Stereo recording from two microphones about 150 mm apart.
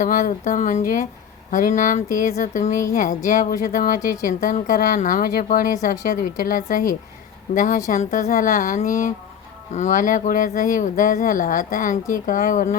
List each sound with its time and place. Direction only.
0.0 s a woman's voice: 60° left (ahead or behind)
3.2 s a woman's voice: 70° left (ahead or behind)